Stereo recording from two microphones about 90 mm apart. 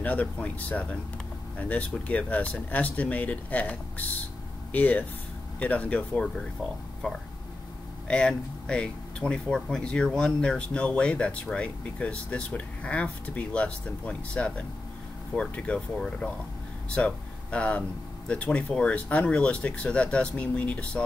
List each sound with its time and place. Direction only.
0.0 s speech: 15° left (ahead or behind)